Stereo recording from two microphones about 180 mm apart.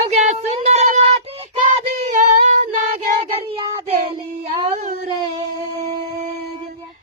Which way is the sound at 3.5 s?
30° right (ahead or behind).